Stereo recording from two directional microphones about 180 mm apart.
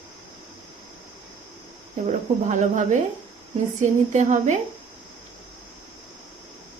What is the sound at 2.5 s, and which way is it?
Speech, 40° right (ahead or behind).